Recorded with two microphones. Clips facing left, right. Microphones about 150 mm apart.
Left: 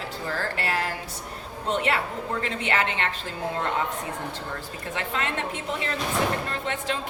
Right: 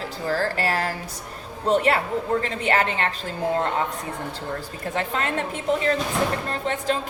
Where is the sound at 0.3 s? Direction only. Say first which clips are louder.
Right 6 dB; 35° right (ahead or behind).